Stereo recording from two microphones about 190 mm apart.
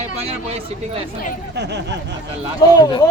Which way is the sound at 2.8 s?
20° left (ahead or behind).